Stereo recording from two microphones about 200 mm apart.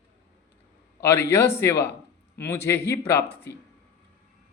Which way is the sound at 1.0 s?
15° left (ahead or behind).